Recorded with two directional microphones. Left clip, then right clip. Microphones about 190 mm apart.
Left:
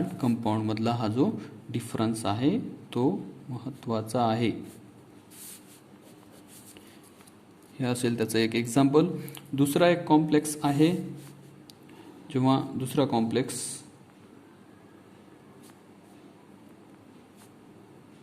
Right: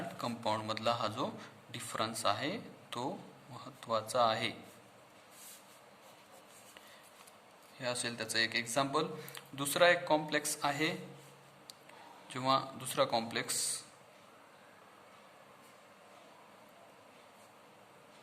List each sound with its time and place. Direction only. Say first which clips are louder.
0.2 s a man's voice: left 6 dB; 15° left (ahead or behind)
7.8 s a man's voice: left 9 dB; 30° left (ahead or behind)
12.3 s a man's voice: left 5 dB; 15° left (ahead or behind)